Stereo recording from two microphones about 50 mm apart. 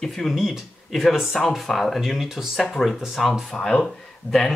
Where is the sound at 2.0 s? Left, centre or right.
Centre.